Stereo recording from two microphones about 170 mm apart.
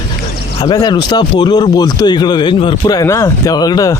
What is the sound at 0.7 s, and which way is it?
Speech, 25° left (ahead or behind).